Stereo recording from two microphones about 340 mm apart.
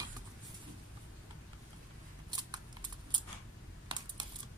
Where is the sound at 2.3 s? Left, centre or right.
Centre.